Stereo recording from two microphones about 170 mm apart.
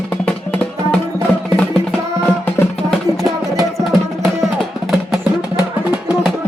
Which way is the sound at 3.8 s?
Centre (ahead or behind).